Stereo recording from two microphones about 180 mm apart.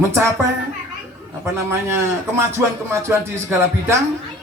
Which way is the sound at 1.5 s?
15° right (ahead or behind).